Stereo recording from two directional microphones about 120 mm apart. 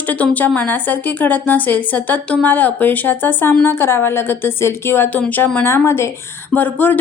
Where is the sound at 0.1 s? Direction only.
15° left (ahead or behind).